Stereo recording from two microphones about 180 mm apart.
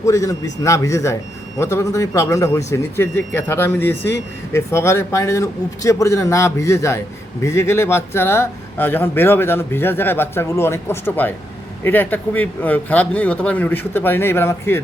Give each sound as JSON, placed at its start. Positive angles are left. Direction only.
{"t": 0.0, "sound": "speech", "side_deg": 15}